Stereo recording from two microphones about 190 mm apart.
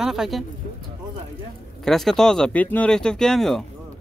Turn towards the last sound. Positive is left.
turn(degrees=0)  # may be behind; listen again after turning